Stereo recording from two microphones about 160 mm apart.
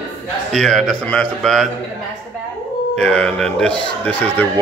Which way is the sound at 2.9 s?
5° left (ahead or behind).